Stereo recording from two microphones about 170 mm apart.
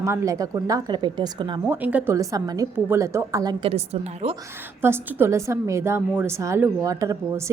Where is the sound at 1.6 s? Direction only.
10° right (ahead or behind).